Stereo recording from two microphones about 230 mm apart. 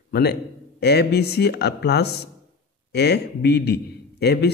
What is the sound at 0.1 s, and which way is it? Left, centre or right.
A man's voice, left.